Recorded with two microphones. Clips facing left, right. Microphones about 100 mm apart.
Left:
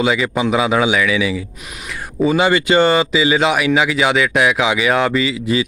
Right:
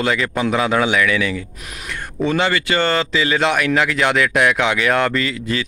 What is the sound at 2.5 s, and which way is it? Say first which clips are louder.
Speech: left 5 dB; 20° left (ahead or behind).